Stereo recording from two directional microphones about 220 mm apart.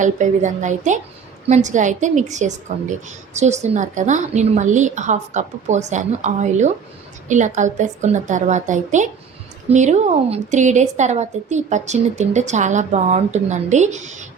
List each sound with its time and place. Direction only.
0.0 s a woman's voice: 35° right (ahead or behind)